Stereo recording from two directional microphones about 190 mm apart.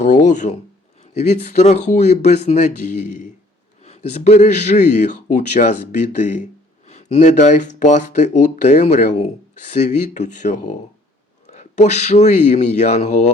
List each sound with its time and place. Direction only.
0.0 s a man's voice: 40° left (ahead or behind)